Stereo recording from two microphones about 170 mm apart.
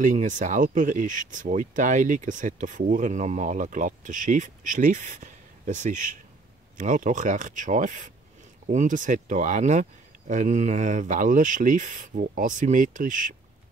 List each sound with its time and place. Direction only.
0.0 s speech: 50° right (ahead or behind)